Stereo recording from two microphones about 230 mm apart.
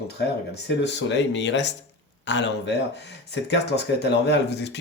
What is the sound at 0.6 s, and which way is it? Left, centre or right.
Speech, left.